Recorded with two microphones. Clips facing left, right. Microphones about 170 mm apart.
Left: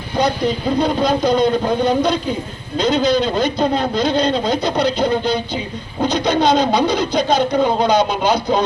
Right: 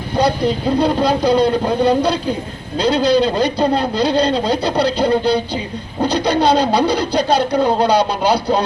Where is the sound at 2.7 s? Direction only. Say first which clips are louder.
Right 2 dB; 35° right (ahead or behind).